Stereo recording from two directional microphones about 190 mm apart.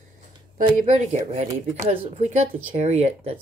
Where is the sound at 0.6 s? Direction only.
40° right (ahead or behind).